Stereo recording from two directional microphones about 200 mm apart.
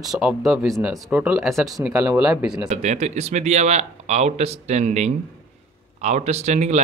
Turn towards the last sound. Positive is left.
turn(degrees=-35)  # may be behind; listen again after turning